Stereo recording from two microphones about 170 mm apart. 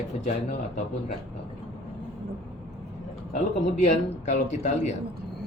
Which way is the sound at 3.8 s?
45° left (ahead or behind).